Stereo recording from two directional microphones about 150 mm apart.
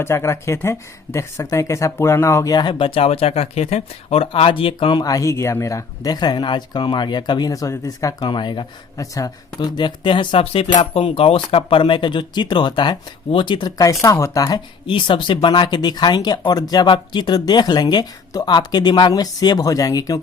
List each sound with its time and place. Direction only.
0.0 s speech: 15° left (ahead or behind)